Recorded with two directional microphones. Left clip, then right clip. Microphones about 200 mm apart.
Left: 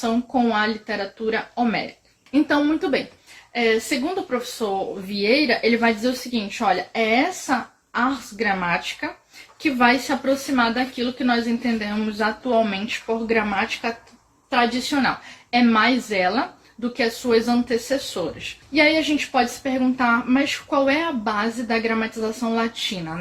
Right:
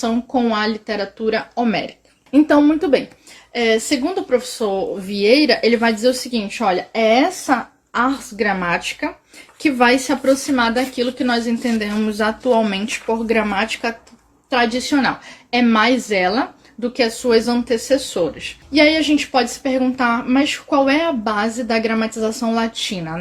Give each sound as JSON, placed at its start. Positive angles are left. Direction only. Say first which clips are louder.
{"t": 0.0, "sound": "a woman's voice", "louder": "right 2 dB", "side_deg": -40}